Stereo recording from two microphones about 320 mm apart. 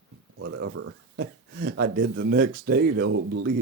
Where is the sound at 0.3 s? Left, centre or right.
Right.